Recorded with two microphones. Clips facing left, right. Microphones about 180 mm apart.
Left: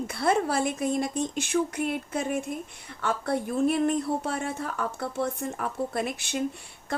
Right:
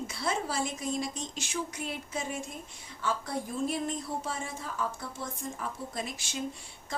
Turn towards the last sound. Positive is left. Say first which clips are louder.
# left 8 dB
turn(degrees=60)  # may be behind; listen again after turning